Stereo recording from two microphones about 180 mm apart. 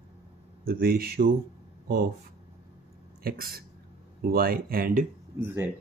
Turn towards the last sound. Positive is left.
turn(degrees=-10)  # may be behind; listen again after turning